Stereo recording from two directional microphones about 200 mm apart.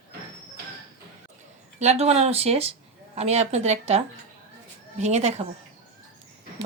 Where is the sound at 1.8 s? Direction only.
30° right (ahead or behind).